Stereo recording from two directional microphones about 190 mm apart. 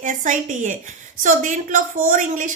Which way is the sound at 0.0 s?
40° right (ahead or behind).